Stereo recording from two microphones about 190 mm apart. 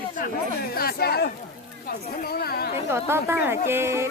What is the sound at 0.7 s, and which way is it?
Speech, 55° left (ahead or behind).